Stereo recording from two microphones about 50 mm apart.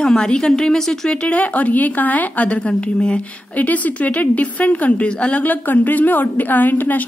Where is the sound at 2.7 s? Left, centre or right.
Left.